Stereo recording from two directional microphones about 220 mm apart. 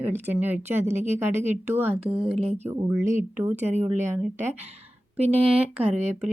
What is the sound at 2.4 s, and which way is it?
Speech, 30° right (ahead or behind).